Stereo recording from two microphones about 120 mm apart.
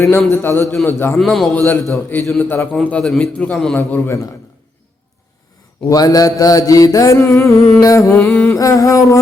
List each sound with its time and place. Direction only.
0.0 s mantra: 20° left (ahead or behind)
1.2 s a man's voice: centre (ahead or behind)
1.5 s a man's voice: 20° left (ahead or behind); by 3.8 s 5° left (ahead or behind)
3.8 s mantra: 20° left (ahead or behind)
5.9 s mantra: 30° left (ahead or behind)